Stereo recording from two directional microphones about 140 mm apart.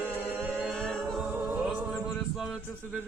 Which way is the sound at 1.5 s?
10° right (ahead or behind).